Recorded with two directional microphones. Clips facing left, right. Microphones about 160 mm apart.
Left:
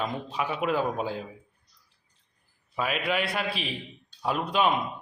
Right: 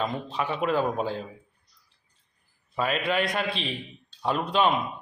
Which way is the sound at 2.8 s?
5° left (ahead or behind).